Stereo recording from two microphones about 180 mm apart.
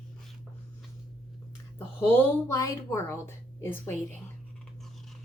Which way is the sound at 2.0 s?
15° left (ahead or behind).